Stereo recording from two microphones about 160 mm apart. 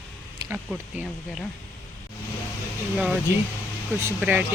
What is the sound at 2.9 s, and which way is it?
Speech, 5° right (ahead or behind).